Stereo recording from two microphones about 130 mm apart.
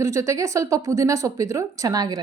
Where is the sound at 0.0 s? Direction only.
25° right (ahead or behind).